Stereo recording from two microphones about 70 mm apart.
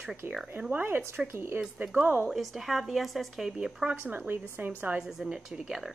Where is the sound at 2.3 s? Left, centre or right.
Centre.